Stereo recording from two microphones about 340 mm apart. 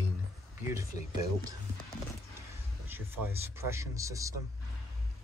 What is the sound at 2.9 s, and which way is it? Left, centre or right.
Speech, centre.